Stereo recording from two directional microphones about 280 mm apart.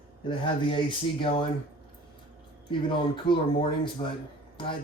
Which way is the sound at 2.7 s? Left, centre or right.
Centre.